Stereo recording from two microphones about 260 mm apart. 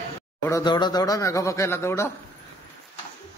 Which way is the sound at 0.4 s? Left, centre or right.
Centre.